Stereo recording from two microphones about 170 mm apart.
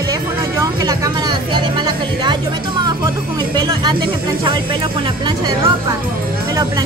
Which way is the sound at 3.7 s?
25° right (ahead or behind).